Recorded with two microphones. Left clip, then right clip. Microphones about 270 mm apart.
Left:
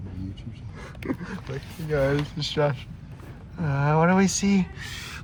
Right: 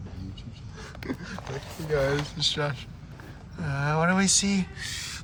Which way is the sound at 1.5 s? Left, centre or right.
Centre.